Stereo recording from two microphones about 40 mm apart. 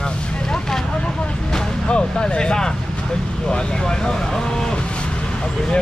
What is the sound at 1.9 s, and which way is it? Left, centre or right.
Speech, left.